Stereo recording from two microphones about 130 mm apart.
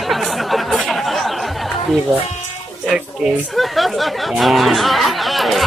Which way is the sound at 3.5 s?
Centre (ahead or behind).